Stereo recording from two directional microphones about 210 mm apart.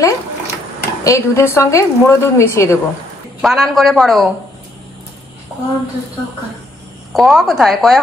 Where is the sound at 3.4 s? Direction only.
Centre (ahead or behind).